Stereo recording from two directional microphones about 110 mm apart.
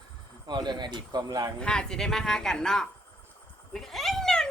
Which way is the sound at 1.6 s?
5° left (ahead or behind).